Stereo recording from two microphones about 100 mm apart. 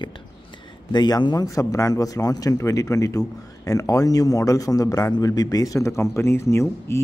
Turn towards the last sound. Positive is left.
turn(degrees=30)  # may be behind; listen again after turning